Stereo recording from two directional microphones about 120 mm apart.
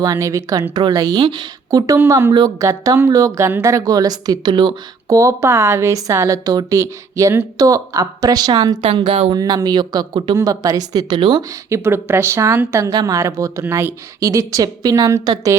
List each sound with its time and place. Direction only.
0.0 s a woman's voice: 30° right (ahead or behind)
8.8 s speech: 45° right (ahead or behind)
9.0 s speech: 70° right (ahead or behind)
9.3 s a woman's voice: 30° right (ahead or behind)
11.7 s a woman's voice: 20° right (ahead or behind)